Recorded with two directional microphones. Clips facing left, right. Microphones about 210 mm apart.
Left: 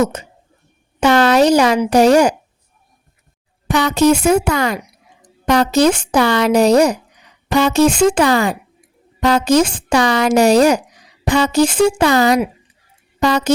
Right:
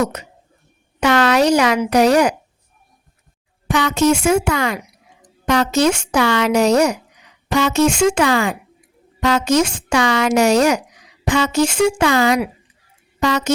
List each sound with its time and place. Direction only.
0.1 s speech: 30° left (ahead or behind)
3.7 s speech: 40° left (ahead or behind)